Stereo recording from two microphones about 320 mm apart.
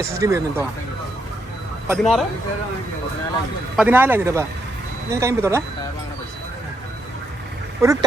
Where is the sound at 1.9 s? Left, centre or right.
Centre.